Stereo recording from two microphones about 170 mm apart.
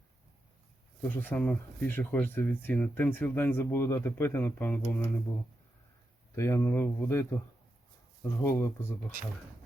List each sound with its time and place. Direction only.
1.0 s speech: 10° left (ahead or behind)
6.3 s speech: 15° left (ahead or behind)